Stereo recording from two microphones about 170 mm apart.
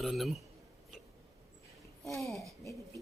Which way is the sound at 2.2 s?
Centre (ahead or behind).